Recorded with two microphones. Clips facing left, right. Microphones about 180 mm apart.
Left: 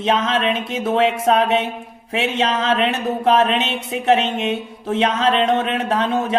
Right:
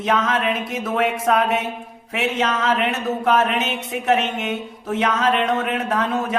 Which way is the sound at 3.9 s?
30° left (ahead or behind).